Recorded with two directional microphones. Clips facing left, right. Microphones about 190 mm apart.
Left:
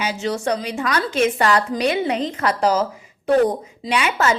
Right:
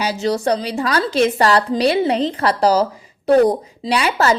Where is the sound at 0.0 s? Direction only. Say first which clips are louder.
Right 4 dB; 35° right (ahead or behind).